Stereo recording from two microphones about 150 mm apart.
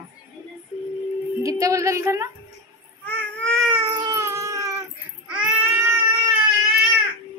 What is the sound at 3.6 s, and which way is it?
Baby cry, 25° right (ahead or behind).